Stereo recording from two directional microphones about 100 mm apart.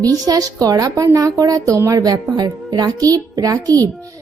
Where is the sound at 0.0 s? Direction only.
35° right (ahead or behind).